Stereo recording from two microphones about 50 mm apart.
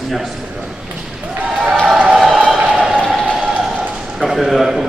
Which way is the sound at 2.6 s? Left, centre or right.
Centre.